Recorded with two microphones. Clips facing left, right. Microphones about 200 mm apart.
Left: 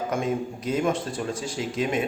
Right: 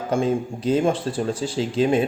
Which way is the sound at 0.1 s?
30° right (ahead or behind).